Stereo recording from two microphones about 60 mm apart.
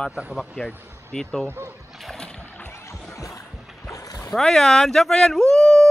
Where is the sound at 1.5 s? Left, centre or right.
Right.